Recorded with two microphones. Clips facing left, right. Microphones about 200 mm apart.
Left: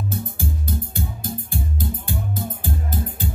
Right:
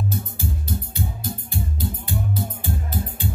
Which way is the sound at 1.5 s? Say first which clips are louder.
Right 1 dB; 45° left (ahead or behind).